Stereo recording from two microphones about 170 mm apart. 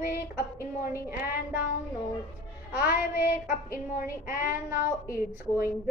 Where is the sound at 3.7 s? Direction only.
60° left (ahead or behind).